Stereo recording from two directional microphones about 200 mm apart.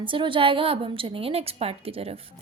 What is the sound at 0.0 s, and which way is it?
A woman's voice, 25° right (ahead or behind).